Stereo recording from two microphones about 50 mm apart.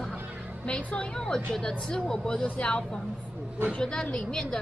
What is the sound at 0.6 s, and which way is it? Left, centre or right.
A woman's voice, left.